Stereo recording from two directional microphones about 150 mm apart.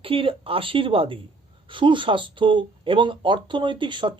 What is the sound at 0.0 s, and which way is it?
Speech, 40° right (ahead or behind).